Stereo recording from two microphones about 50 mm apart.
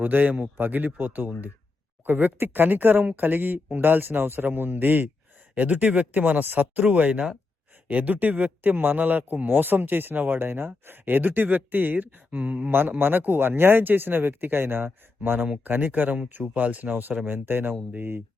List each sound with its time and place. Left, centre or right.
0.0 s a man's voice: right
13.0 s a man's voice: right